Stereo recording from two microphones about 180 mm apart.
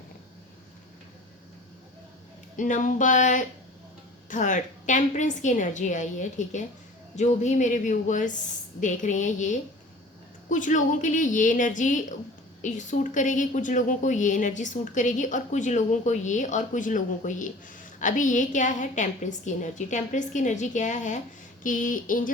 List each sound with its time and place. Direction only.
2.6 s a woman's voice: 45° left (ahead or behind)